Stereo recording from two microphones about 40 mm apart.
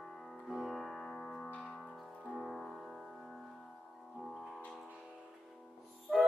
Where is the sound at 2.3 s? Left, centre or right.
Centre.